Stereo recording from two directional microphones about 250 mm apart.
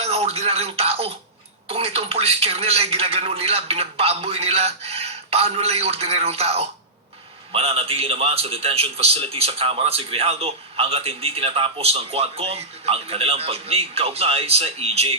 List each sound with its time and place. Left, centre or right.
0.0 s music: right
1.6 s a man's voice: right